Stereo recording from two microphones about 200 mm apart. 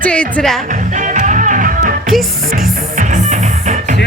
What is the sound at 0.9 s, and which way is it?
Music, 40° right (ahead or behind).